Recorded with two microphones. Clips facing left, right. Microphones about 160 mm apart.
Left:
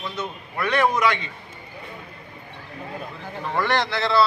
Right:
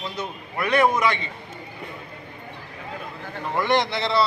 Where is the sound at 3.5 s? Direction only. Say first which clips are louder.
Right 1 dB; 15° right (ahead or behind).